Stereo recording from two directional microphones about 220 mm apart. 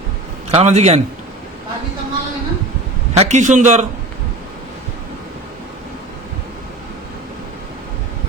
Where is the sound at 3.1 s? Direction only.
30° right (ahead or behind).